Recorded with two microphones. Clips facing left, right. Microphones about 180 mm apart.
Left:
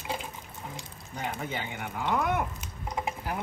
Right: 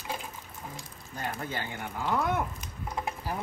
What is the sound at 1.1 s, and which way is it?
Speech, 15° left (ahead or behind).